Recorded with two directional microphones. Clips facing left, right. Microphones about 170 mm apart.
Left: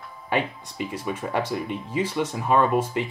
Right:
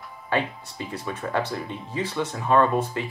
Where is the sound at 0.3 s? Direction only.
15° left (ahead or behind).